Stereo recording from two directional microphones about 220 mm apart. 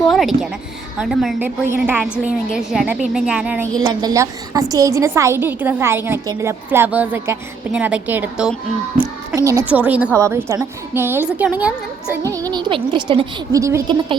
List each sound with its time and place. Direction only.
0.1 s a woman's voice: centre (ahead or behind)
12.3 s a woman's voice: 15° right (ahead or behind)